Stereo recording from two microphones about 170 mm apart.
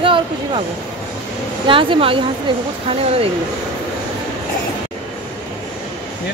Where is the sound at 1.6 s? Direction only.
30° right (ahead or behind).